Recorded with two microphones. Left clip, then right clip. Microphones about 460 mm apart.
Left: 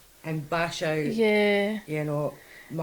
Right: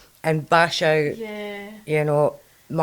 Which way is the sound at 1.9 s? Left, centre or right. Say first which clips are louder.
Right 10 dB; right.